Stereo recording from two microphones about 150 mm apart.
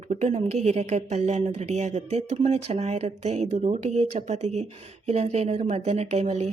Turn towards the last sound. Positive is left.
turn(degrees=-45)  # may be behind; listen again after turning